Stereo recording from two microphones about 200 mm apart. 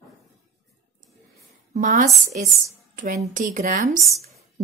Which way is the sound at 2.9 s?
40° right (ahead or behind).